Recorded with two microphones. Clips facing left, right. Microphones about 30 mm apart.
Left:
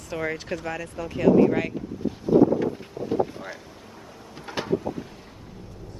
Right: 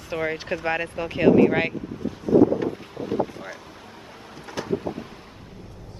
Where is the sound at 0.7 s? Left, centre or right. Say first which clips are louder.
Right 6 dB; right.